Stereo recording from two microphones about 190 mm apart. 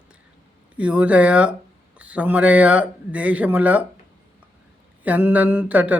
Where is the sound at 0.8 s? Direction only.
5° right (ahead or behind).